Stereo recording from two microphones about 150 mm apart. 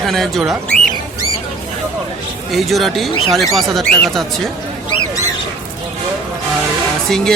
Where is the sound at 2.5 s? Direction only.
Centre (ahead or behind).